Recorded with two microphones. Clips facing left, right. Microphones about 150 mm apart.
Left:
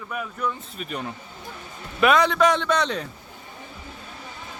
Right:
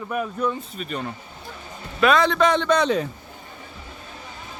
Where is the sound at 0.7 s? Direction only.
5° left (ahead or behind).